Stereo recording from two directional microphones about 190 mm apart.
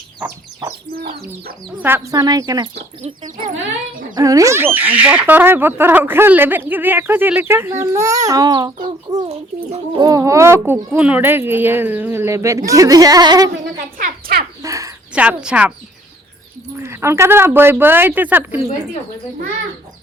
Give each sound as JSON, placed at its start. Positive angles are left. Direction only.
{"t": 0.9, "sound": "speech", "side_deg": -50}
{"t": 1.8, "sound": "speech", "side_deg": -10}
{"t": 4.1, "sound": "speech", "side_deg": -15}
{"t": 9.3, "sound": "speech", "side_deg": -35}
{"t": 10.0, "sound": "speech", "side_deg": -15}
{"t": 14.0, "sound": "a sound", "side_deg": -55}
{"t": 14.6, "sound": "bird", "side_deg": -15}
{"t": 15.1, "sound": "speech", "side_deg": -5}
{"t": 16.8, "sound": "speech", "side_deg": -15}